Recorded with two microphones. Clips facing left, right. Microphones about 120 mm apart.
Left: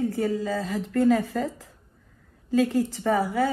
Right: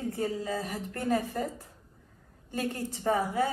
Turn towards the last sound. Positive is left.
turn(degrees=90)